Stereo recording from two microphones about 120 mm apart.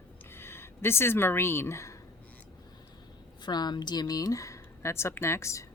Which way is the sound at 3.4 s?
35° left (ahead or behind).